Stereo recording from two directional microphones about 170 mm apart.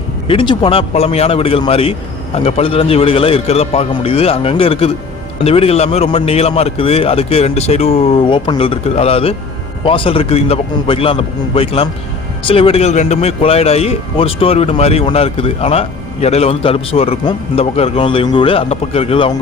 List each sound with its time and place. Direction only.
0.3 s speech: 30° left (ahead or behind)